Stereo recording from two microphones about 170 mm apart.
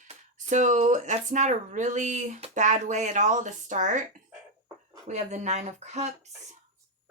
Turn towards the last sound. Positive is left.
turn(degrees=-40)  # may be behind; listen again after turning